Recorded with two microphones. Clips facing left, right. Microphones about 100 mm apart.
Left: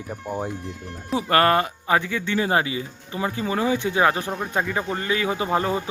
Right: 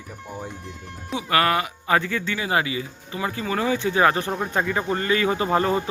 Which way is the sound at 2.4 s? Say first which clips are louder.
Left 3 dB; 30° left (ahead or behind).